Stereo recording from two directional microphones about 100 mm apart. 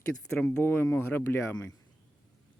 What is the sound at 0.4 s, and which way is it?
Speech, 20° left (ahead or behind).